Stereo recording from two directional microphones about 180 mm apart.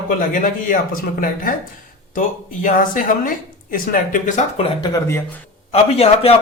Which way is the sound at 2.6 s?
45° left (ahead or behind).